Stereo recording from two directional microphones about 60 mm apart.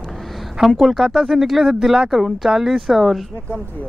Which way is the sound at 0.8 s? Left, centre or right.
Centre.